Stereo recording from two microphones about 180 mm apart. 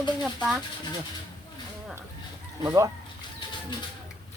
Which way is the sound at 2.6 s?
20° right (ahead or behind).